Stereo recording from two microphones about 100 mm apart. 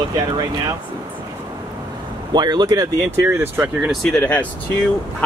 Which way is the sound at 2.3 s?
45° right (ahead or behind).